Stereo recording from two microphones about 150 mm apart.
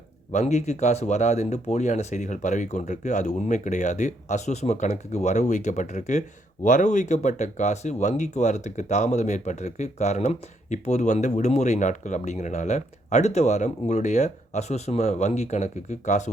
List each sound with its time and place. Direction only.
0.3 s speech: 50° left (ahead or behind)